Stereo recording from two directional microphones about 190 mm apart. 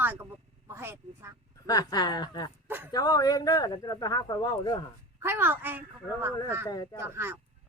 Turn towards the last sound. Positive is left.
turn(degrees=-10)  # may be behind; listen again after turning